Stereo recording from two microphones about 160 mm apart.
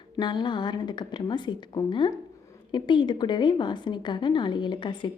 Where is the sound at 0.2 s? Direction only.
30° left (ahead or behind).